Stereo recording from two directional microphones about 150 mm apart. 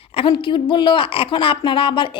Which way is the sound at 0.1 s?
35° left (ahead or behind).